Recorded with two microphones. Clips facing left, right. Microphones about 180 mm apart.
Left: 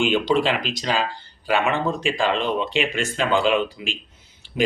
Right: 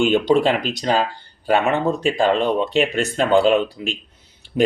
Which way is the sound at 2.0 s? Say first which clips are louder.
Right 6 dB; 40° right (ahead or behind).